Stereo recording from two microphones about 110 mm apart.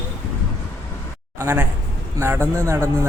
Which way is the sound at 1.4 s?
20° right (ahead or behind).